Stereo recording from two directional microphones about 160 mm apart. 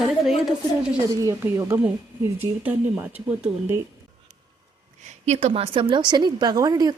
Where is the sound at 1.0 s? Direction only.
20° right (ahead or behind).